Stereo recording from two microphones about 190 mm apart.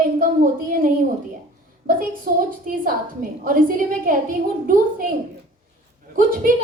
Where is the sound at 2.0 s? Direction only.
50° right (ahead or behind).